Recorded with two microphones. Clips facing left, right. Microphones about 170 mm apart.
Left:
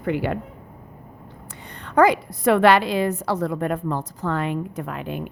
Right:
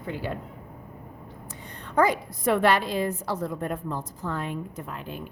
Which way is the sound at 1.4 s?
75° left (ahead or behind).